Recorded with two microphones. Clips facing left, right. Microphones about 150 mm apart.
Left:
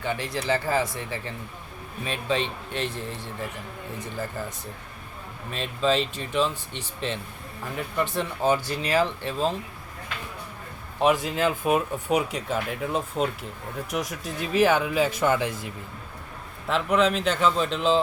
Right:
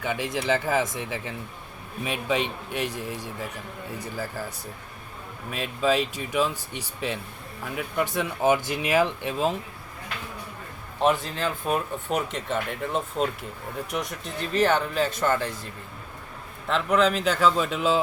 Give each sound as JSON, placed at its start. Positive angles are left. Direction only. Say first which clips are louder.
{"t": 0.0, "sound": "speech", "louder": "right 1 dB", "side_deg": -15}
{"t": 11.0, "sound": "speech", "louder": "left 2 dB", "side_deg": 10}
{"t": 16.6, "sound": "a man's voice", "louder": "even", "side_deg": 0}